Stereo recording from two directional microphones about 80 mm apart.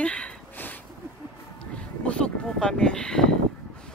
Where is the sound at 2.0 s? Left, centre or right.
Centre.